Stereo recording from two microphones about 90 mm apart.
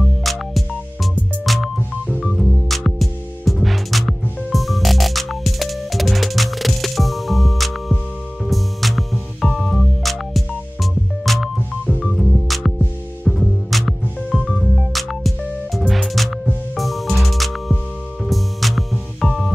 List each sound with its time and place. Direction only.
0.0 s music: centre (ahead or behind)
11.5 s music: 10° right (ahead or behind)